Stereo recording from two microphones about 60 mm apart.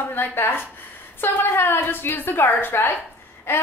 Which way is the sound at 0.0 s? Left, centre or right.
Left.